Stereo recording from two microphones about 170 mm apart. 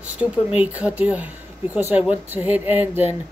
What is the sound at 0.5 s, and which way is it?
Speech, 5° right (ahead or behind).